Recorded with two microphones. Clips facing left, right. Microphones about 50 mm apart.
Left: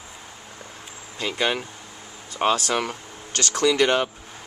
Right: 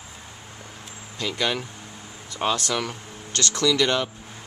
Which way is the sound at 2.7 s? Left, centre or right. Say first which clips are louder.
Left 2 dB; left.